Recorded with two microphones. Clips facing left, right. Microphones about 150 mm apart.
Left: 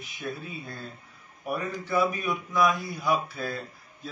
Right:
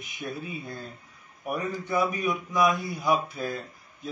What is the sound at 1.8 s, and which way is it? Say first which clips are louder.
Speech: left 1 dB; 15° right (ahead or behind).